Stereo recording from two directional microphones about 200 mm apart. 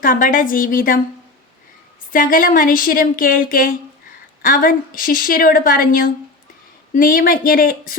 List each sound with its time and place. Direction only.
0.0 s speech: 45° left (ahead or behind)
2.1 s speech: 45° left (ahead or behind)